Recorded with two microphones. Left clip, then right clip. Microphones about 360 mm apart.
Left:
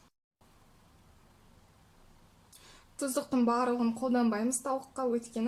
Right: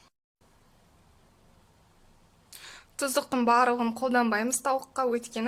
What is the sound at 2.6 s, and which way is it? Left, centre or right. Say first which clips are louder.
A woman's voice: right 5 dB; right.